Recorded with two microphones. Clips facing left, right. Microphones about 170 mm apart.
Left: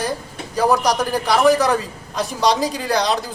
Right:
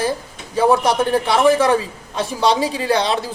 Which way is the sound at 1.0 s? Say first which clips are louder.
Right 1 dB; centre (ahead or behind).